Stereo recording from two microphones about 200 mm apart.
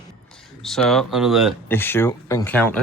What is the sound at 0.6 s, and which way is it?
Speech, centre (ahead or behind).